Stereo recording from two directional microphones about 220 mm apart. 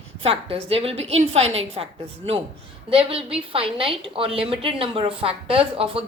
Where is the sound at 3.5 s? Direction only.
25° right (ahead or behind).